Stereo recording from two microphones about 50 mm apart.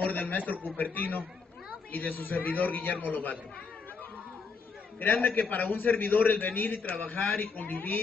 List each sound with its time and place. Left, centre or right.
0.0 s a sound: left
0.5 s a man's voice: left
5.0 s a man's voice: left
5.7 s a man's voice: left